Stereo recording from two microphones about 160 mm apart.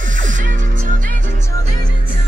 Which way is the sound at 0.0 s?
55° right (ahead or behind).